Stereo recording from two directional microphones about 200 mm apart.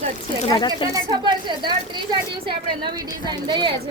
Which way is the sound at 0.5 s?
25° left (ahead or behind).